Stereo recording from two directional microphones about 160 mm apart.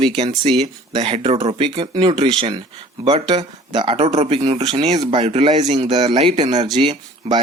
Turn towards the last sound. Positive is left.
turn(degrees=-35)  # may be behind; listen again after turning